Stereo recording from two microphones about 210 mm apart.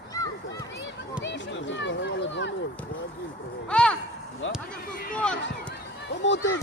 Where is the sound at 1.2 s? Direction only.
60° left (ahead or behind).